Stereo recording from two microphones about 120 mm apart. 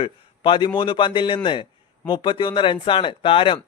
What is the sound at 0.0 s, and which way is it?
A man's voice, 40° left (ahead or behind).